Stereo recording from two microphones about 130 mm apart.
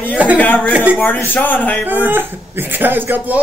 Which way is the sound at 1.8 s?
15° right (ahead or behind).